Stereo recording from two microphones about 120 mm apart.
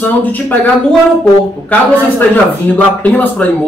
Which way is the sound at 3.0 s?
10° left (ahead or behind).